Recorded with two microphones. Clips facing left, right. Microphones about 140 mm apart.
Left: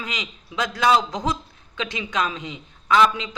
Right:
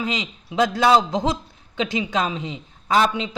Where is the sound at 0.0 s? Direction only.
25° right (ahead or behind).